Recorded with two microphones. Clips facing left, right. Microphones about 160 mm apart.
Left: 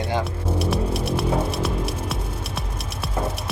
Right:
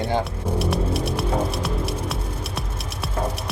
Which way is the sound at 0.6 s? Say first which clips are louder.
Even; centre (ahead or behind).